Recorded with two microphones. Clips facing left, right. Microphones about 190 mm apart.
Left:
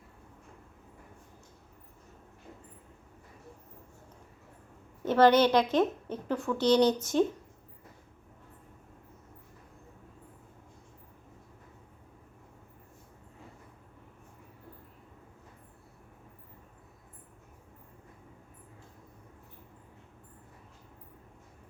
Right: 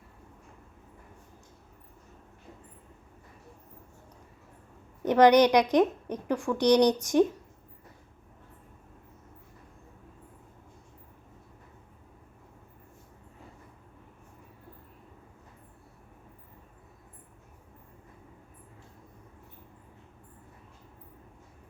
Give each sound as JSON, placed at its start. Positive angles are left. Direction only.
{"t": 5.0, "sound": "speech", "side_deg": -15}